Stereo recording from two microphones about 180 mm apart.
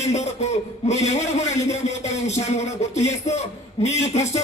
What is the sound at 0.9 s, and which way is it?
A man's voice, 40° left (ahead or behind).